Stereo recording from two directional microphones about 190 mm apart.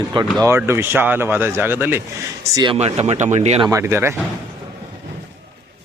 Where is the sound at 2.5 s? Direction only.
25° right (ahead or behind).